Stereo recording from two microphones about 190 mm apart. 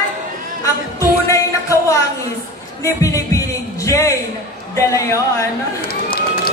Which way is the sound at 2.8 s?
15° left (ahead or behind).